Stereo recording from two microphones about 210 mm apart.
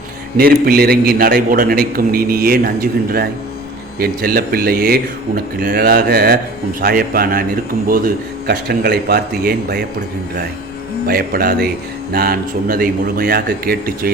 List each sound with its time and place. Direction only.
0.3 s a man's voice: 45° right (ahead or behind)
11.0 s a man's voice: 45° right (ahead or behind)